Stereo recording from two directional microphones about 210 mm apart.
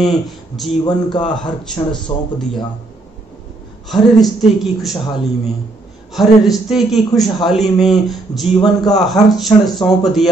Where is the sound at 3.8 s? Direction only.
Centre (ahead or behind).